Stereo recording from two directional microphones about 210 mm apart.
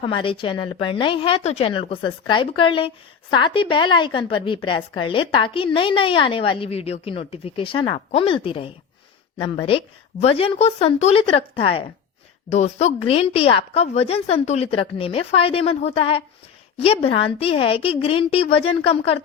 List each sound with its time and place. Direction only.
0.0 s a woman's voice: 25° left (ahead or behind)